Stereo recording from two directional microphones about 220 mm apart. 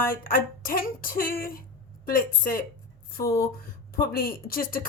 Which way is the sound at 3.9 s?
40° left (ahead or behind).